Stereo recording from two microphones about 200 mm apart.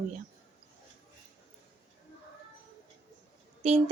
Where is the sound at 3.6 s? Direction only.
35° right (ahead or behind).